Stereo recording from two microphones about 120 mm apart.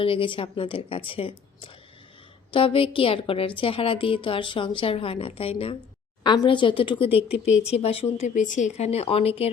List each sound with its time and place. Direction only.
0.0 s a woman's voice: 45° left (ahead or behind)
6.2 s a woman's voice: 35° left (ahead or behind); by 8.0 s 55° left (ahead or behind)
8.2 s speech: 90° left; by 9.5 s 55° left (ahead or behind)